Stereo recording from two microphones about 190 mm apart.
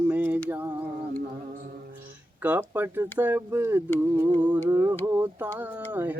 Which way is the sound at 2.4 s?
10° right (ahead or behind).